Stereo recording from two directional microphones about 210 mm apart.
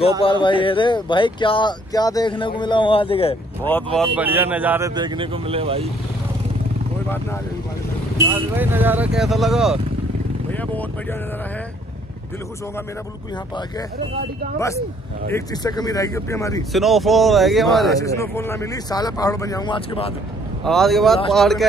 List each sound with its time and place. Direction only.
0.2 s speech: 25° left (ahead or behind)
3.6 s speech: 5° left (ahead or behind)
4.2 s speech: 10° right (ahead or behind); by 5.9 s 25° right (ahead or behind)
8.3 s speech: 10° right (ahead or behind); by 11.1 s 10° left (ahead or behind)
15.3 s speech: 20° left (ahead or behind)
16.7 s speech: centre (ahead or behind)
18.0 s speech: 15° left (ahead or behind)
20.6 s speech: centre (ahead or behind)